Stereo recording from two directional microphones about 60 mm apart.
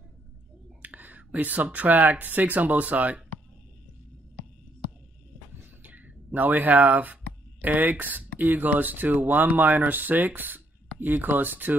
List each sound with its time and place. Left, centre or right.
0.8 s speech: right
5.8 s a sound: right
7.6 s speech: right